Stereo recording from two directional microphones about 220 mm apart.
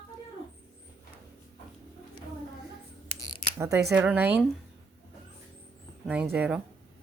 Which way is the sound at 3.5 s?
15° right (ahead or behind).